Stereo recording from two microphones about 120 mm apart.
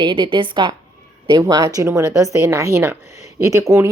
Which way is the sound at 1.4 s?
30° right (ahead or behind).